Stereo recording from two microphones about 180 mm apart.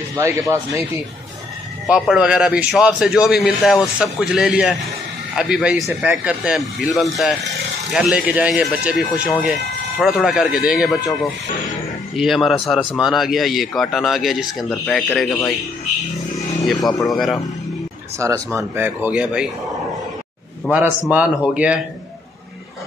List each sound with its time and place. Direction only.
0.2 s speech: 15° right (ahead or behind)
1.9 s speech: 5° right (ahead or behind)
7.9 s speech: 5° right (ahead or behind)
16.8 s speech: centre (ahead or behind)
18.2 s speech: 15° right (ahead or behind)
21.1 s speech: 5° right (ahead or behind)